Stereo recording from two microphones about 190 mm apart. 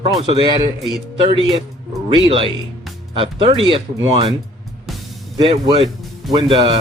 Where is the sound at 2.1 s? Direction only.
25° right (ahead or behind).